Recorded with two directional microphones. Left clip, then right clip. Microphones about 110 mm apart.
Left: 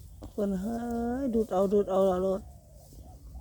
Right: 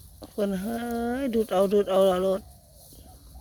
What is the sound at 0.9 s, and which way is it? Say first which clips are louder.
Speech: right 4 dB; 35° right (ahead or behind).